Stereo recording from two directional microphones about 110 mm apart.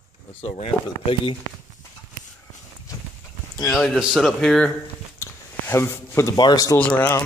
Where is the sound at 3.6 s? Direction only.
Centre (ahead or behind).